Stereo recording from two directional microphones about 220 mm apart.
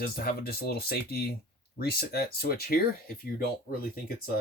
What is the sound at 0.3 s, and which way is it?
Speech, 45° left (ahead or behind).